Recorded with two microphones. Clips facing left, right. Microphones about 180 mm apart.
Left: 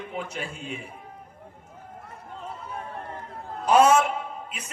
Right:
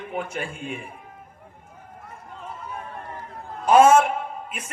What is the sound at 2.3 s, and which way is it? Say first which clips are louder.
Run: right 1 dB; 30° left (ahead or behind).